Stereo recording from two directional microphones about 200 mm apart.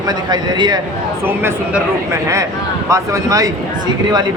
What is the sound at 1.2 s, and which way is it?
A man's voice, 10° right (ahead or behind).